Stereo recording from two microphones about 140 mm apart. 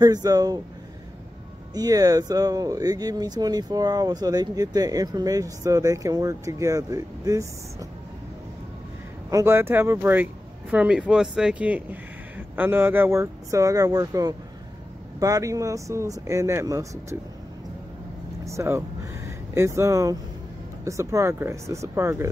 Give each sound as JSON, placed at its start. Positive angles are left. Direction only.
{"t": 0.0, "sound": "speech", "side_deg": -25}
{"t": 1.7, "sound": "speech", "side_deg": -25}
{"t": 9.3, "sound": "speech", "side_deg": -20}
{"t": 18.4, "sound": "speech", "side_deg": -20}